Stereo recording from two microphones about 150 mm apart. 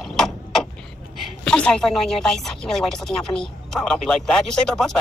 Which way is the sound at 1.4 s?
5° left (ahead or behind).